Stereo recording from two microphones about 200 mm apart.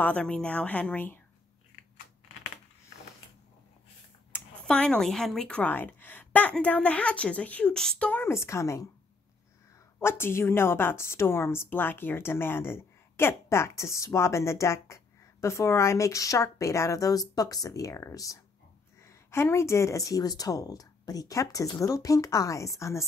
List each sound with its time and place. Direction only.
0.0 s a woman's voice: 5° left (ahead or behind)
4.3 s a woman's voice: 5° left (ahead or behind)
9.9 s a woman's voice: 10° left (ahead or behind)